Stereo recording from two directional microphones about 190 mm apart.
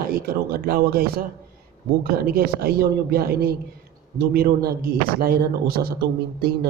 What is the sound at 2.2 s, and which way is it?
A woman's voice, 55° right (ahead or behind).